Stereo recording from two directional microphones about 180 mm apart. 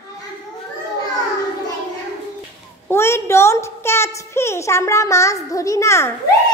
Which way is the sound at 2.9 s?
15° left (ahead or behind).